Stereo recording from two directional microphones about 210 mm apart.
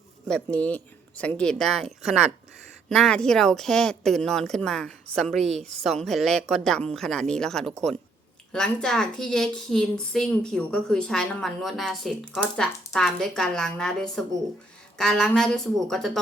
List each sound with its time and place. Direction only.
0.3 s a woman's voice: 5° left (ahead or behind)